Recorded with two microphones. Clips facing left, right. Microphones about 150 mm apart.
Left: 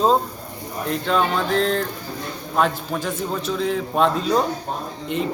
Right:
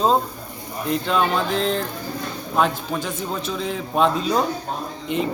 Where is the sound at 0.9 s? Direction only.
5° right (ahead or behind).